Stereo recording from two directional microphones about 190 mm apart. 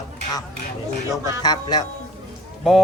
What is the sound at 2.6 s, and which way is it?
Speech, centre (ahead or behind).